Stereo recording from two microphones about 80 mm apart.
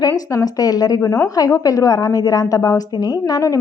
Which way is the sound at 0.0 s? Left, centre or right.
Left.